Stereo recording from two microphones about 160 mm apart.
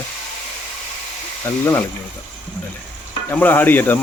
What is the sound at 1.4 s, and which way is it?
Speech, 15° left (ahead or behind).